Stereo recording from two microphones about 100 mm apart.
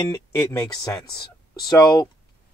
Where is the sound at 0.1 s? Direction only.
35° left (ahead or behind).